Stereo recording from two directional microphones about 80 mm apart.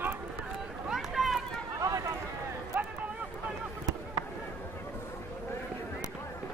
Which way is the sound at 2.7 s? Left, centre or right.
Right.